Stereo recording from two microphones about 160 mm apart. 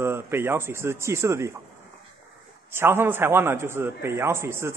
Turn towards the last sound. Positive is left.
turn(degrees=-15)  # may be behind; listen again after turning